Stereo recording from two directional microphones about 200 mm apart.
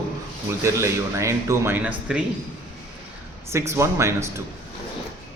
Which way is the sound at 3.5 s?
15° right (ahead or behind).